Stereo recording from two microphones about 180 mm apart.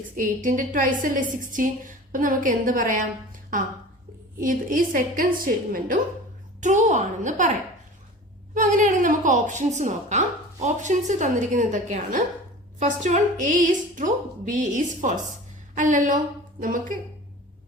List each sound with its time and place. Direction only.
0.2 s a woman's voice: 45° right (ahead or behind)
4.4 s a woman's voice: 50° right (ahead or behind)
8.5 s a woman's voice: 45° right (ahead or behind)